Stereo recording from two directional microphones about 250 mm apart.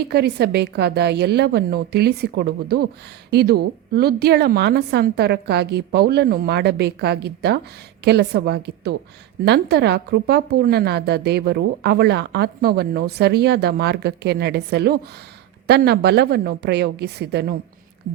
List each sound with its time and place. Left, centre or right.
0.1 s a woman's voice: right